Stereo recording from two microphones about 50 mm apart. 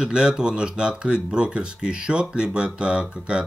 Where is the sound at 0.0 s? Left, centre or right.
Centre.